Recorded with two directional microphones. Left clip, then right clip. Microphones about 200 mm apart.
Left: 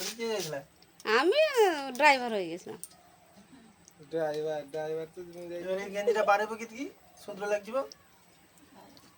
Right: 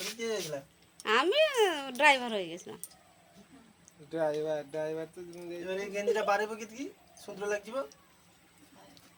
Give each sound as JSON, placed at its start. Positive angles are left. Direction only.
{"t": 0.0, "sound": "a sound", "side_deg": -10}
{"t": 1.0, "sound": "a child's voice", "side_deg": 5}
{"t": 4.1, "sound": "speech", "side_deg": -40}
{"t": 5.6, "sound": "a man's voice", "side_deg": -15}